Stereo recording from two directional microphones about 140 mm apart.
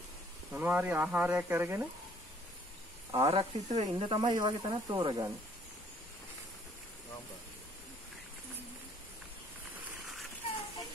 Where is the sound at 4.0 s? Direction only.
35° right (ahead or behind).